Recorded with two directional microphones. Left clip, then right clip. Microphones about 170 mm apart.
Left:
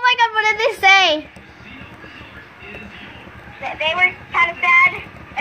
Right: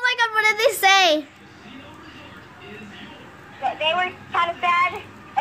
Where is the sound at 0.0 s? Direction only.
50° right (ahead or behind).